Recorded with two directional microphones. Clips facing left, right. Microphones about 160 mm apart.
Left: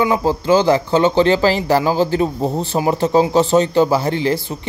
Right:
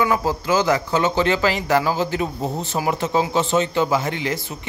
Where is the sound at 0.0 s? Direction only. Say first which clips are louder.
Left 4 dB; 25° left (ahead or behind).